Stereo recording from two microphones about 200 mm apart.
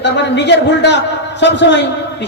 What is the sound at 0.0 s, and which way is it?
A man's voice, 60° left (ahead or behind).